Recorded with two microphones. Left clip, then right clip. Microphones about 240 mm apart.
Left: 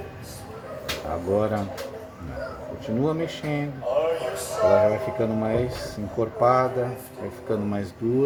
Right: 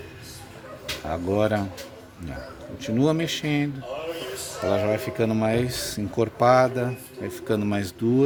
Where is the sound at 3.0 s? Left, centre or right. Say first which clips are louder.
Right 3 dB; right.